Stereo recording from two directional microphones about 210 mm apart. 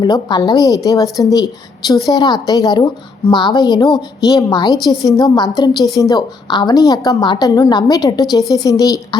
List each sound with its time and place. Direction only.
0.0 s a woman's voice: 20° left (ahead or behind)